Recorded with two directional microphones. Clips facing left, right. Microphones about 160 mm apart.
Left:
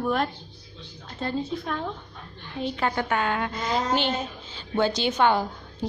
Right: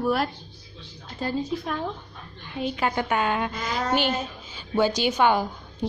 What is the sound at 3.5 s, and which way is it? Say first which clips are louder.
Speech: left 2 dB; 25° left (ahead or behind).